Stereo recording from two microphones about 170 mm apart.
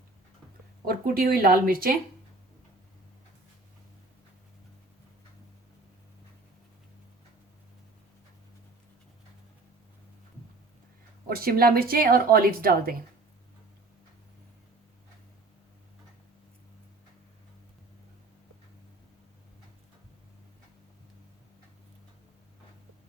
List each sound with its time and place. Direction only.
0.9 s speech: 60° right (ahead or behind)
11.3 s speech: 60° right (ahead or behind)